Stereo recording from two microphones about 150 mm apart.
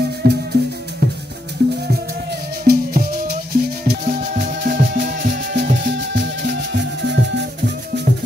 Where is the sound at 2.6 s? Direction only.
80° right.